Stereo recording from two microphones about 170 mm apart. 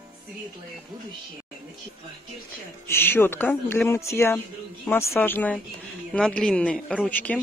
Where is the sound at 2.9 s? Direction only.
15° left (ahead or behind).